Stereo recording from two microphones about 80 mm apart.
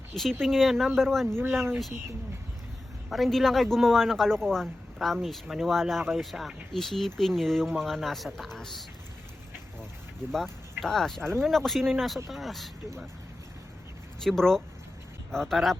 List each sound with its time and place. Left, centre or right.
0.1 s a man's voice: centre
3.1 s a man's voice: centre
10.3 s a man's voice: centre
14.3 s a man's voice: centre